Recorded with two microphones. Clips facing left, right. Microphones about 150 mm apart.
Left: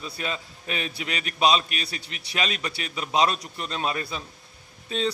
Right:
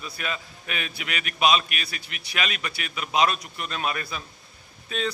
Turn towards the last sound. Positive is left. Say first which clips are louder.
# left 2 dB
turn(degrees=30)  # may be behind; listen again after turning